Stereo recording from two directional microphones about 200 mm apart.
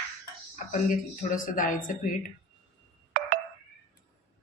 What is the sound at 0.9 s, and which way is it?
A woman's voice, 40° left (ahead or behind).